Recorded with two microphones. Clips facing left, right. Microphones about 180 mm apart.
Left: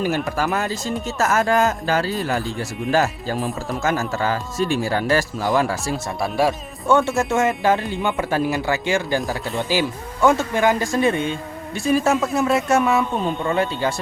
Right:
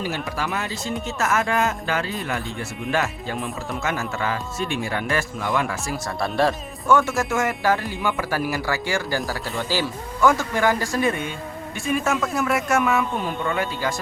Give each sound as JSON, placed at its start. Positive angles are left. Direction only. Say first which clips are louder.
{"t": 0.3, "sound": "speech", "louder": "left 5 dB", "side_deg": 45}
{"t": 6.1, "sound": "speech", "louder": "left 1 dB", "side_deg": 10}
{"t": 6.8, "sound": "speech", "louder": "left 2 dB", "side_deg": 25}